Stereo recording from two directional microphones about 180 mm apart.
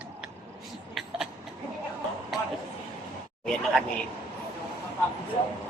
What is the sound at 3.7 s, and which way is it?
Speech, 5° left (ahead or behind).